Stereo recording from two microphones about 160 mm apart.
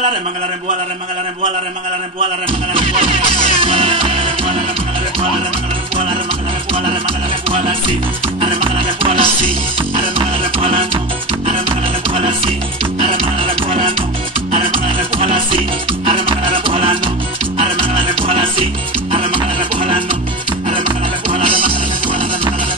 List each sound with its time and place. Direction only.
2.7 s music: 35° right (ahead or behind)
6.7 s music: 35° right (ahead or behind)
8.4 s music: 35° right (ahead or behind)
12.1 s music: 35° right (ahead or behind)
15.1 s music: 35° right (ahead or behind)